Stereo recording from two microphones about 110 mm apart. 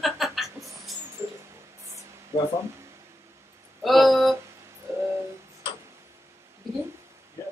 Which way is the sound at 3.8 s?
Centre (ahead or behind).